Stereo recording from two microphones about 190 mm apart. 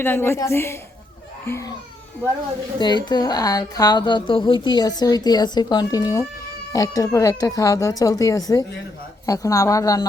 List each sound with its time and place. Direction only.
0.0 s speech: 10° left (ahead or behind)
2.7 s speech: 25° left (ahead or behind)